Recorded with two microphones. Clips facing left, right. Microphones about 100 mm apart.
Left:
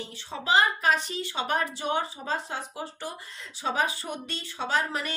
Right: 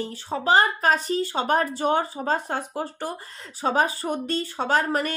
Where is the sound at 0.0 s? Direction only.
40° right (ahead or behind).